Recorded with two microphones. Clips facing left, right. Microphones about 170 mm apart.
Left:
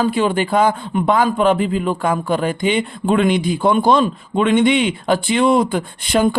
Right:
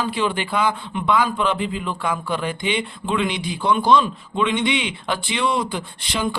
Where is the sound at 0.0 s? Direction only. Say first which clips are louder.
Left 6 dB; 45° left (ahead or behind).